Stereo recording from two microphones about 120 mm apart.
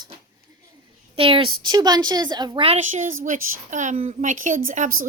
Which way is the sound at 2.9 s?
90° right.